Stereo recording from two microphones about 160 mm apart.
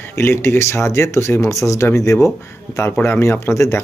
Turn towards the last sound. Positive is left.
turn(degrees=20)  # may be behind; listen again after turning